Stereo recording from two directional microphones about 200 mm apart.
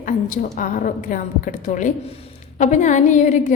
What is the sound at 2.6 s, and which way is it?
Speech, 35° left (ahead or behind).